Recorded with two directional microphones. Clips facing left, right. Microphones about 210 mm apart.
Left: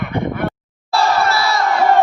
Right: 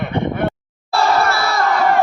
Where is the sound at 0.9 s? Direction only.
55° right (ahead or behind).